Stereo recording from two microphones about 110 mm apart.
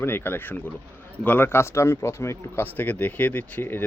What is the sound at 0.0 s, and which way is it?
Speech, 20° left (ahead or behind).